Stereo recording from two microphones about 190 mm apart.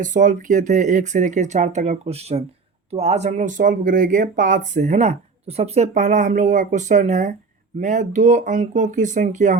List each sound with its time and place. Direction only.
0.0 s speech: 40° right (ahead or behind)